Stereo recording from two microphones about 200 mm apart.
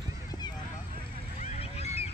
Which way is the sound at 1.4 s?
30° left (ahead or behind).